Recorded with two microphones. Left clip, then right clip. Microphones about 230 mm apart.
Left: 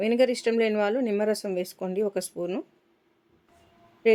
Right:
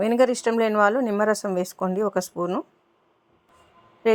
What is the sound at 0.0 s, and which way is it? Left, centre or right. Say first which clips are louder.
Speech: right 3 dB; centre.